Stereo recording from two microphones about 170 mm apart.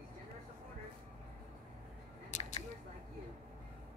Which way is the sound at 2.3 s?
45° left (ahead or behind).